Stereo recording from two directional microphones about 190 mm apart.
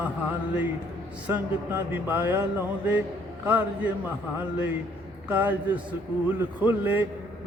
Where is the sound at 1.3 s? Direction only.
10° right (ahead or behind).